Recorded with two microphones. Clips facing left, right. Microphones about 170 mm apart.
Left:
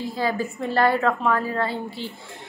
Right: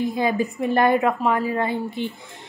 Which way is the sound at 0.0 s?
20° right (ahead or behind).